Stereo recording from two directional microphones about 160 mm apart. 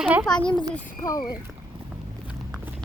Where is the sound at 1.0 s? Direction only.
25° left (ahead or behind).